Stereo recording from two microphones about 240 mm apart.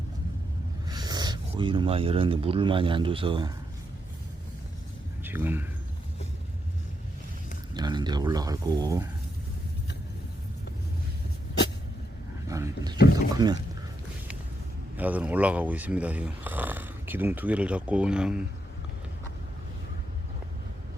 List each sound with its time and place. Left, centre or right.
0.9 s speech: centre
5.2 s speech: centre
7.7 s speech: centre
12.5 s a sound: centre
13.3 s speech: centre
14.9 s speech: centre